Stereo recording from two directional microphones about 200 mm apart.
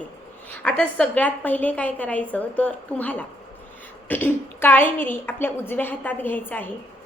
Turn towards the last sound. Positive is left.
turn(degrees=10)  # may be behind; listen again after turning